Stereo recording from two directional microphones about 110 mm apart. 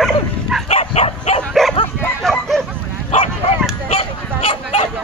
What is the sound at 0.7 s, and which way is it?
Dog, 70° left (ahead or behind).